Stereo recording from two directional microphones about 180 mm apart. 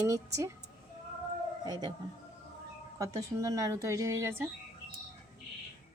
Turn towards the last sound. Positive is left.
turn(degrees=-10)  # may be behind; listen again after turning